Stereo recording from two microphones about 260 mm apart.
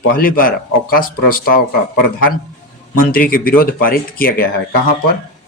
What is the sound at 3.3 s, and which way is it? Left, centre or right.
Speech, left.